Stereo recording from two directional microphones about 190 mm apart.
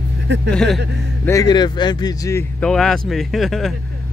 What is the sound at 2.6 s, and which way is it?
Speech, 5° left (ahead or behind).